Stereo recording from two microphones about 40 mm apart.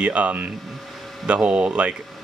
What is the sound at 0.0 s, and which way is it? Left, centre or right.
Speech, right.